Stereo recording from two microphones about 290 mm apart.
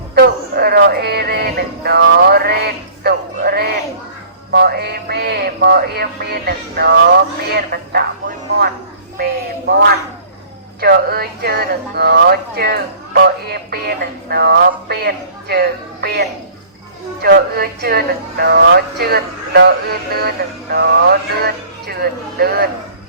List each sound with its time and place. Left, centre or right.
0.1 s music: right
10.8 s speech: right
17.2 s speech: right